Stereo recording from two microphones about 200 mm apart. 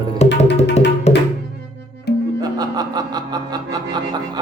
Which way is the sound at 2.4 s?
20° right (ahead or behind).